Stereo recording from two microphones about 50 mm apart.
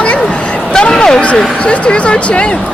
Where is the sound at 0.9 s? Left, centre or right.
Centre.